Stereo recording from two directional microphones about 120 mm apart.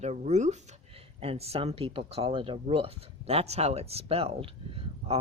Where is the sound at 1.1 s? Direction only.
60° right (ahead or behind).